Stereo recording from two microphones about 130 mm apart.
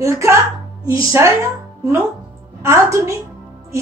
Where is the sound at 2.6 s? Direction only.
25° right (ahead or behind).